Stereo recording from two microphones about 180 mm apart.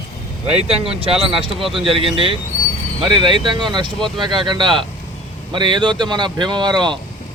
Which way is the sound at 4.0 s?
Centre (ahead or behind).